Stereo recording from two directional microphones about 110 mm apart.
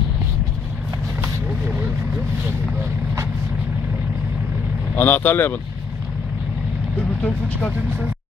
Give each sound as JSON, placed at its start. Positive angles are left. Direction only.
{"t": 4.9, "sound": "speech", "side_deg": 15}
{"t": 7.0, "sound": "speech", "side_deg": 10}